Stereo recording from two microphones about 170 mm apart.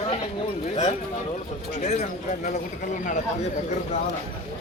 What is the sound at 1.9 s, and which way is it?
Speech, 45° left (ahead or behind).